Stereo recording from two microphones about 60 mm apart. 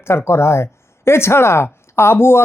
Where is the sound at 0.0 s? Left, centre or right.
Left.